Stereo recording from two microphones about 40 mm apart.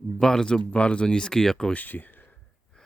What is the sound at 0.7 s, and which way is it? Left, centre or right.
Speech, left.